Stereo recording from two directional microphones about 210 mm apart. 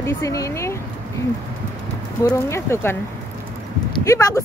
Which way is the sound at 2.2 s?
15° left (ahead or behind).